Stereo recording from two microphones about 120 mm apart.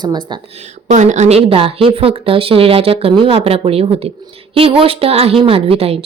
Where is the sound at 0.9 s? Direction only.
80° right.